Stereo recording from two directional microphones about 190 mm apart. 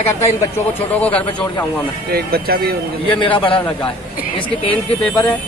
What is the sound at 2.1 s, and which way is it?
Speech, 55° right (ahead or behind).